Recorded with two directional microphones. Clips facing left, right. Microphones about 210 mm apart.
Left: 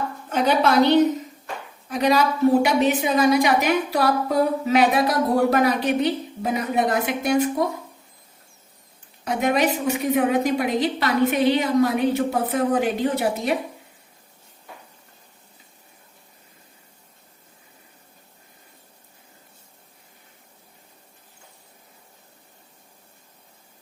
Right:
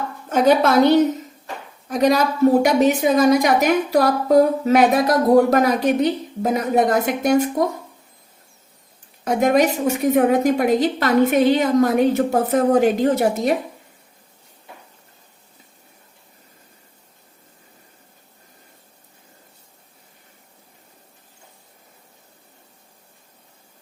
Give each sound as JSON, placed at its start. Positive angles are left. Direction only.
{"t": 0.3, "sound": "a woman's voice", "side_deg": -45}
{"t": 9.2, "sound": "a woman's voice", "side_deg": -45}